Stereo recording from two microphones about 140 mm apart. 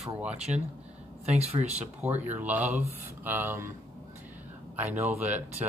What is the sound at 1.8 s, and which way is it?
Speech, 10° right (ahead or behind).